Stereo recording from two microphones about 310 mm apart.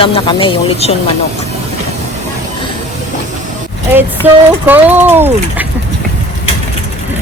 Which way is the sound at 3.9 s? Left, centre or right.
Centre.